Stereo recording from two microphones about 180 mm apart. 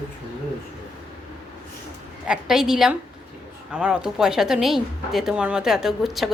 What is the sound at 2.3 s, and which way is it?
Speech, 5° right (ahead or behind).